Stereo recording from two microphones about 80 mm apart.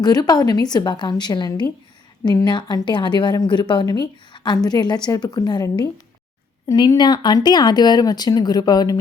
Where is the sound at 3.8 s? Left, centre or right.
Left.